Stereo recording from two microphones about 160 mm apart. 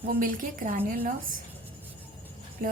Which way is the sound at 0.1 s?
60° right (ahead or behind).